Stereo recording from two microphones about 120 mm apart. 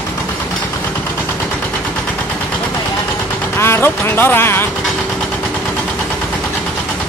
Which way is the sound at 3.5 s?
20° left (ahead or behind).